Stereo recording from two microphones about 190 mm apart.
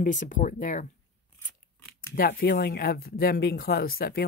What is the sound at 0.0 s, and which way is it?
Speech, 45° left (ahead or behind).